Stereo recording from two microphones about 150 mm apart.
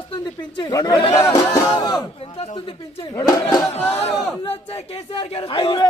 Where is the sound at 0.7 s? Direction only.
25° left (ahead or behind).